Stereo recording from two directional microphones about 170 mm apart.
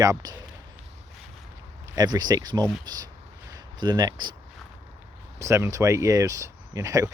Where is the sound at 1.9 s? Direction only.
25° right (ahead or behind).